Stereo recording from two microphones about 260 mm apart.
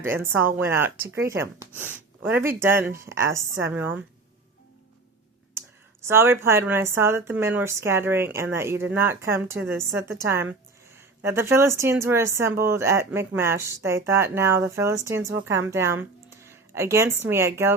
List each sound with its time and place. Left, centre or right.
0.0 s speech: centre
5.6 s a sound: centre
6.1 s a woman's voice: centre